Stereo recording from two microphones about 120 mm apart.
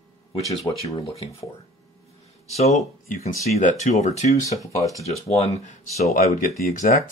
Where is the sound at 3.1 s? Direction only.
75° left (ahead or behind).